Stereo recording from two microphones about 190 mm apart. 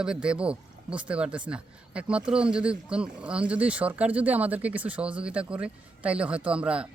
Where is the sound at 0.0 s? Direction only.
5° right (ahead or behind).